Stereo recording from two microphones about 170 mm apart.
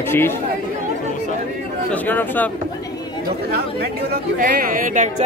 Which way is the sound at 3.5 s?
65° right (ahead or behind).